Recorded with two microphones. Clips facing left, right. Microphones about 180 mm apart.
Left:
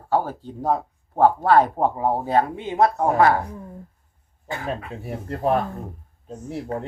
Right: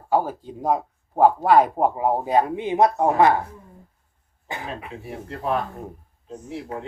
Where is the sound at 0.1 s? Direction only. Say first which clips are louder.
Right 1 dB; 10° right (ahead or behind).